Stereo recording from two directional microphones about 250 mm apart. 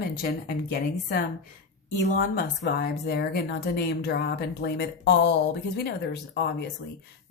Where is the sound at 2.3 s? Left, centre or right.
Left.